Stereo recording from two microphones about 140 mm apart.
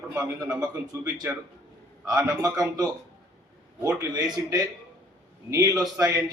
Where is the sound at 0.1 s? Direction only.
25° right (ahead or behind).